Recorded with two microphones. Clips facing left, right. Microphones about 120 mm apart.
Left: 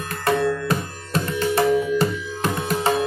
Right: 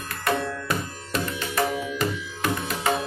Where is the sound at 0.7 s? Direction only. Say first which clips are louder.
Left 4 dB; 35° left (ahead or behind).